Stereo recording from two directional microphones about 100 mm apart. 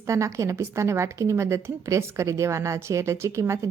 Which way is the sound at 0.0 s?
30° right (ahead or behind).